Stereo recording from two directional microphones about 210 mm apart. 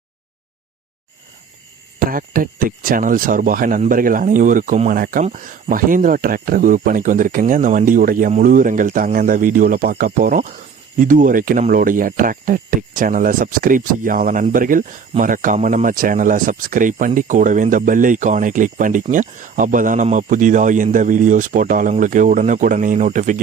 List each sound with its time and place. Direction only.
2.0 s speech: 40° right (ahead or behind)